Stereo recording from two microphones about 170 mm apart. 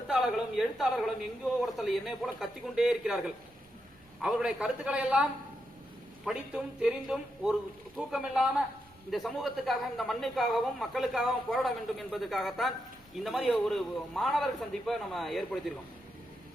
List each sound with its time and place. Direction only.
0.1 s a woman's voice: 5° right (ahead or behind)